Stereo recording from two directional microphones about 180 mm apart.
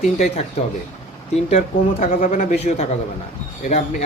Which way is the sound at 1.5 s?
45° left (ahead or behind).